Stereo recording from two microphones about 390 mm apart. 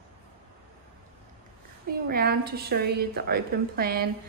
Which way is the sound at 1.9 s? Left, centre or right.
Right.